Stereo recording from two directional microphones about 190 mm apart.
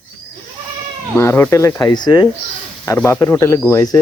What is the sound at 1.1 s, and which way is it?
Speech, 10° left (ahead or behind).